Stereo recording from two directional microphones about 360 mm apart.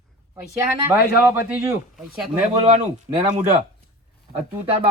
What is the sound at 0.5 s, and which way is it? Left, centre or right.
Speech, centre.